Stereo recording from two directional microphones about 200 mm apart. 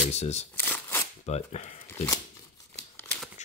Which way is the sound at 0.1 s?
35° left (ahead or behind).